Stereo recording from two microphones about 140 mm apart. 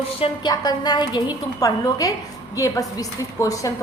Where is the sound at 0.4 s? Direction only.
30° left (ahead or behind).